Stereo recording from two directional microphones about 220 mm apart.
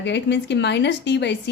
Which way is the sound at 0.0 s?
50° left (ahead or behind).